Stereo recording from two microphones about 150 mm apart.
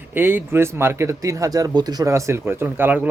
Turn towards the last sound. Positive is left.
turn(degrees=-15)  # may be behind; listen again after turning